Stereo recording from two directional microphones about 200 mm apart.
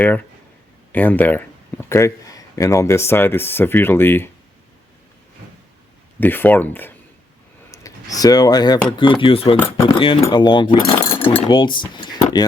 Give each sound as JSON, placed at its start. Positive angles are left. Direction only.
{"t": 0.0, "sound": "speech", "side_deg": 10}
{"t": 6.1, "sound": "speech", "side_deg": 10}